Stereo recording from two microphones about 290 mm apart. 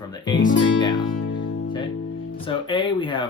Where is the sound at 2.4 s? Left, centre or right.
Centre.